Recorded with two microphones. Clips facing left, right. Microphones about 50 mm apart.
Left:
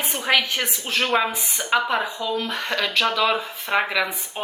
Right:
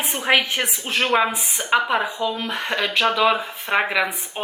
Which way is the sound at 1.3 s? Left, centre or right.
Right.